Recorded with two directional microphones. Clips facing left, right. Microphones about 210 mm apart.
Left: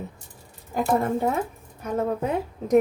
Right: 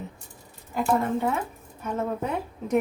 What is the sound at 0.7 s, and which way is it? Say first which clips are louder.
Speech: left 2 dB; 45° left (ahead or behind).